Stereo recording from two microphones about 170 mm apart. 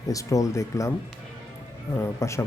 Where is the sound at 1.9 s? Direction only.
15° left (ahead or behind).